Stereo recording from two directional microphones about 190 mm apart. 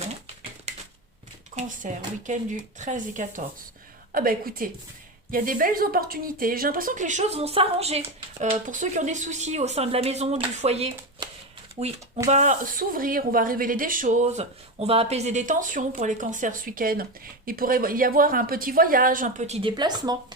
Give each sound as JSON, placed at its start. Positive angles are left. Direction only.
{"t": 0.7, "sound": "typewriter", "side_deg": -35}
{"t": 1.8, "sound": "speech", "side_deg": -40}
{"t": 12.3, "sound": "speech", "side_deg": -40}